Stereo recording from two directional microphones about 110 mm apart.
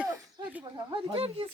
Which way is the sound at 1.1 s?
60° right (ahead or behind).